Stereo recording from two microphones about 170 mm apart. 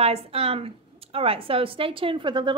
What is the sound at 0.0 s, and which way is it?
Speech, 35° right (ahead or behind).